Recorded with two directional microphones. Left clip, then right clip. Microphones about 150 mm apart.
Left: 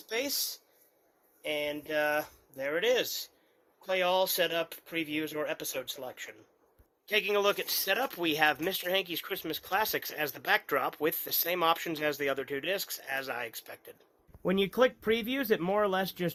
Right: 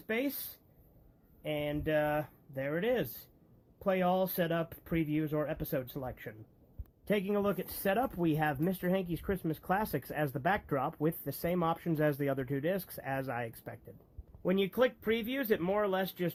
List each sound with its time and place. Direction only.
0.1 s speech: 10° left (ahead or behind)
1.4 s speech: 15° left (ahead or behind)
11.9 s speech: 10° left (ahead or behind)
13.7 s speech: 25° left (ahead or behind)